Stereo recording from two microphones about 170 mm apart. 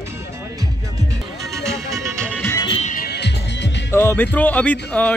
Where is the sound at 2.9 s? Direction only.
70° left (ahead or behind); by 3.9 s 90° left.